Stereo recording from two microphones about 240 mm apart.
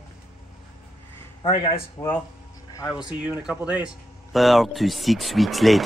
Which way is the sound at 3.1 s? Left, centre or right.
Centre.